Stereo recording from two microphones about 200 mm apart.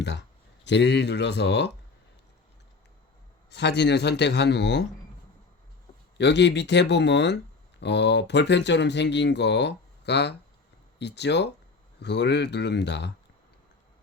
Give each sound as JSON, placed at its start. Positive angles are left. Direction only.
{"t": 0.0, "sound": "speech", "side_deg": 60}
{"t": 3.5, "sound": "speech", "side_deg": 60}
{"t": 6.1, "sound": "speech", "side_deg": 60}